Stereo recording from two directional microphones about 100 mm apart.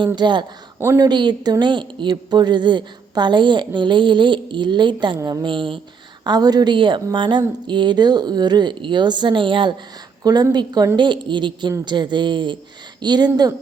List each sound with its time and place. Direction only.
0.2 s a woman's voice: 50° right (ahead or behind)
5.5 s speech: 55° right (ahead or behind)
6.2 s a woman's voice: 40° right (ahead or behind)
10.5 s a woman's voice: 45° right (ahead or behind)